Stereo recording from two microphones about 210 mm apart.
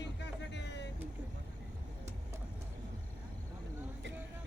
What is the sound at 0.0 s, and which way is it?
Music, 55° left (ahead or behind).